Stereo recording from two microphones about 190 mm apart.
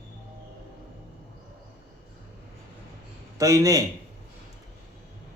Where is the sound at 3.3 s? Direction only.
15° right (ahead or behind).